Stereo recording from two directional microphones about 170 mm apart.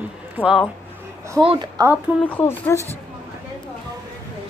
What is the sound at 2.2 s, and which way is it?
Speech, 10° left (ahead or behind).